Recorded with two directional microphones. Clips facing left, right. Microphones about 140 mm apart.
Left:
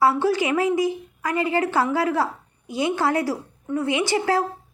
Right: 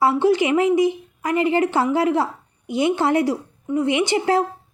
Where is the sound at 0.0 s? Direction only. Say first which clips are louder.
Right 3 dB; 20° right (ahead or behind).